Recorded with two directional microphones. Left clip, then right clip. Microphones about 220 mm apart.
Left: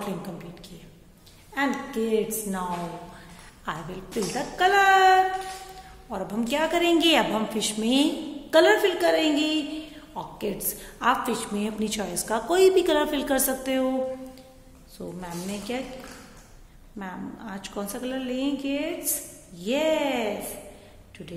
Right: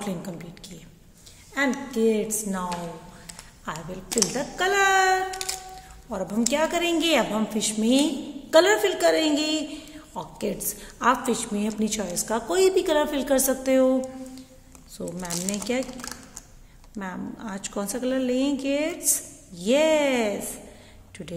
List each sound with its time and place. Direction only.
1.5 s a woman's voice: 25° right (ahead or behind)
15.0 s a woman's voice: 30° right (ahead or behind)
17.0 s a woman's voice: 25° right (ahead or behind)